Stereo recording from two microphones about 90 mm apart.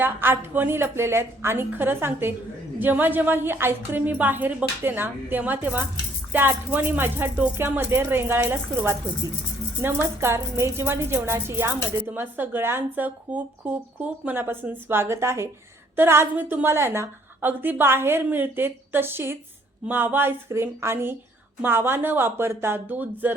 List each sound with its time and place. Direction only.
0.0 s a woman's voice: 20° right (ahead or behind)